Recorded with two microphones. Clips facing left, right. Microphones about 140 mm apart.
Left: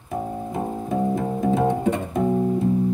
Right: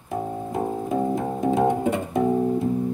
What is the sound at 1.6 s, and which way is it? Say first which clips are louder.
Music: even; 20° right (ahead or behind).